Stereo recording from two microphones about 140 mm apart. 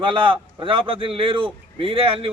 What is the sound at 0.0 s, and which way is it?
A man's voice, 40° right (ahead or behind).